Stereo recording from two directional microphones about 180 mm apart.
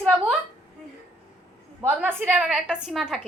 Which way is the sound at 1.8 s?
10° right (ahead or behind).